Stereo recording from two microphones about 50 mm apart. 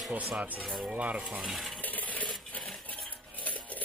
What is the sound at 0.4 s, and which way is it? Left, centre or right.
Coin, right.